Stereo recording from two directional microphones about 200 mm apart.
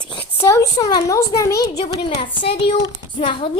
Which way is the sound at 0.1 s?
10° left (ahead or behind).